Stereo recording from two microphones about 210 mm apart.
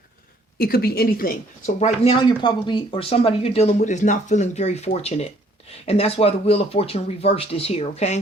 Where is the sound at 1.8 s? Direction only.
30° left (ahead or behind).